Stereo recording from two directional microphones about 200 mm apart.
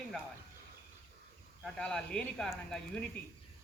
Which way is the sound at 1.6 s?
5° left (ahead or behind).